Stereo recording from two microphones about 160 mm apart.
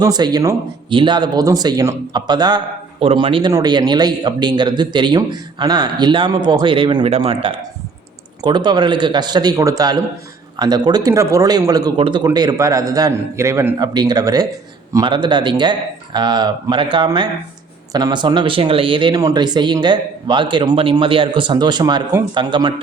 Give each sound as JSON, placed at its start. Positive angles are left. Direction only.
{"t": 0.0, "sound": "a man's voice", "side_deg": -25}